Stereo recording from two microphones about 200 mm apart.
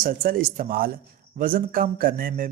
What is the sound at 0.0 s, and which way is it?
A man's voice, 45° right (ahead or behind).